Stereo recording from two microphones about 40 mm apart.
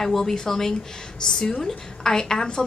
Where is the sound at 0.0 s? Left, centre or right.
Centre.